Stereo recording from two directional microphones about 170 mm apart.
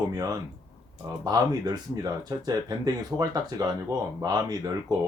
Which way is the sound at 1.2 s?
20° right (ahead or behind).